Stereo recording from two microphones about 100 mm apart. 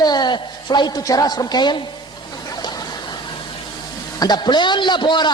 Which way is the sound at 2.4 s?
40° left (ahead or behind).